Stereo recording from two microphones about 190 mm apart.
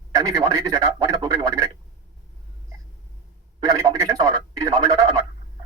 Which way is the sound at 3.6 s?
20° right (ahead or behind).